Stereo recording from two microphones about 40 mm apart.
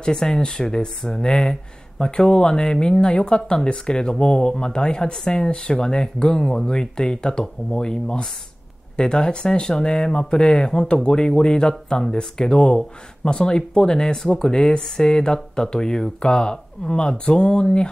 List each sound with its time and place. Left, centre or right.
0.0 s speech: centre